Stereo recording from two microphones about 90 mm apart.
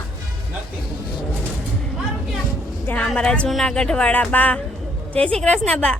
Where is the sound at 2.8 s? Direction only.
10° left (ahead or behind).